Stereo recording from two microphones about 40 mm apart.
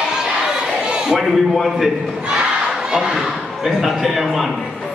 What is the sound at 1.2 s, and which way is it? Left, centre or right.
Speech, centre.